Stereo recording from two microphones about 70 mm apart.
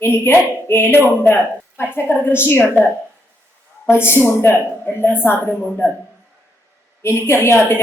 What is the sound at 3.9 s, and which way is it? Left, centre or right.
A woman's voice, left.